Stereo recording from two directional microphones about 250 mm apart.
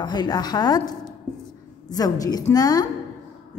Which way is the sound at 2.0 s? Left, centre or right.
Centre.